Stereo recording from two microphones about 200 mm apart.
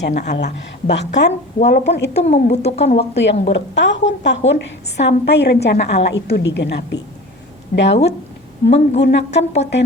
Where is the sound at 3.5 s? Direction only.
65° left (ahead or behind).